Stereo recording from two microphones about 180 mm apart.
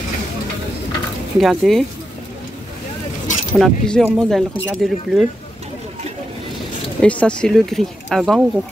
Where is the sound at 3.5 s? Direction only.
5° left (ahead or behind).